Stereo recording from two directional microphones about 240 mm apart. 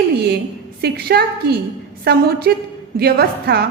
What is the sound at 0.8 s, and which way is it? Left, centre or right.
A woman's voice, right.